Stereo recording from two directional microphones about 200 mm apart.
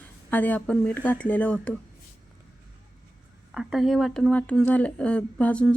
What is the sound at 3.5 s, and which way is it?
Speech, centre (ahead or behind).